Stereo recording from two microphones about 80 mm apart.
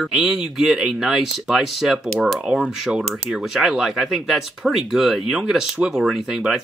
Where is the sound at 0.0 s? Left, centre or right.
Centre.